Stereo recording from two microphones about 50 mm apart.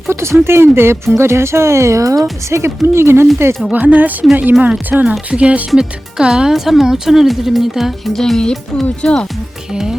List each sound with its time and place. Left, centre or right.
0.1 s speech: right
2.5 s speech: right
3.7 s speech: right
4.9 s speech: centre
5.7 s speech: centre
6.5 s speech: centre
8.1 s speech: centre